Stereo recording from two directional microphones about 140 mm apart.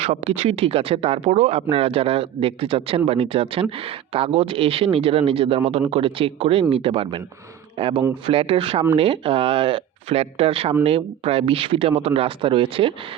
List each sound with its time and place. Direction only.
0.0 s speech: 45° right (ahead or behind)